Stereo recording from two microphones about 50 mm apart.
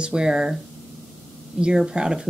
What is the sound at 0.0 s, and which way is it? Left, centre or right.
Speech, centre.